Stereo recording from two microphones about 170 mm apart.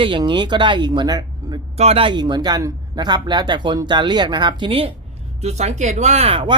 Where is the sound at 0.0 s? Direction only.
30° right (ahead or behind).